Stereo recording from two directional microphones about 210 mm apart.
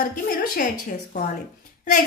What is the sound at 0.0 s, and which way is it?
Speech, 45° left (ahead or behind).